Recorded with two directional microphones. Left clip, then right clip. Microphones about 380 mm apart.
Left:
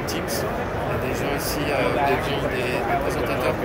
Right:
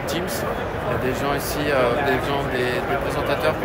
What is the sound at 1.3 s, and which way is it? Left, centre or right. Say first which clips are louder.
Speech: right 3 dB; centre.